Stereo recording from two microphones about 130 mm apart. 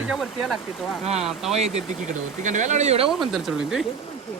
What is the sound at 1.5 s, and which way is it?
Speech, 65° right (ahead or behind).